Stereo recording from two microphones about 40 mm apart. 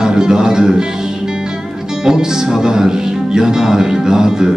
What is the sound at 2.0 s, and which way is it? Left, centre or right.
Speech, centre.